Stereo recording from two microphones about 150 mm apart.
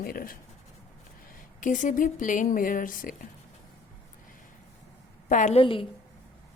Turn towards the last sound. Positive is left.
turn(degrees=35)  # may be behind; listen again after turning